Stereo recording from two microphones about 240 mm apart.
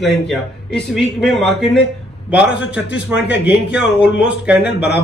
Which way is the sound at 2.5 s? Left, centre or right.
Left.